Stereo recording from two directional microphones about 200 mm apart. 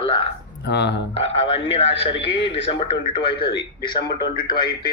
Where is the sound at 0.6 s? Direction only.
60° left (ahead or behind).